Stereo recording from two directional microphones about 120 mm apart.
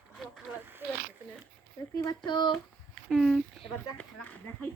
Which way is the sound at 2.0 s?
35° left (ahead or behind).